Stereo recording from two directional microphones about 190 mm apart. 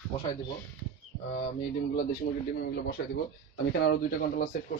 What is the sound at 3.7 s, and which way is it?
Speech, 55° left (ahead or behind).